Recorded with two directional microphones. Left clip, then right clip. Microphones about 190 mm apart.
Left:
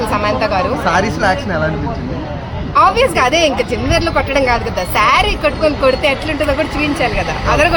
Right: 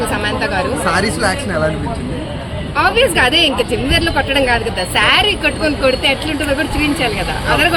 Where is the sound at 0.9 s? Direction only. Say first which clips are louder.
Left 2 dB; 40° left (ahead or behind).